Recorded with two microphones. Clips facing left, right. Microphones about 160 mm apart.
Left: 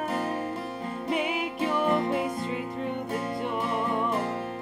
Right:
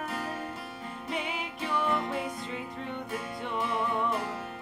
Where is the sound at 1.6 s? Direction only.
50° left (ahead or behind).